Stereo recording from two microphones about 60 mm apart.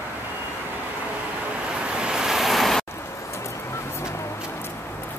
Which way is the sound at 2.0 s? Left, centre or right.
Centre.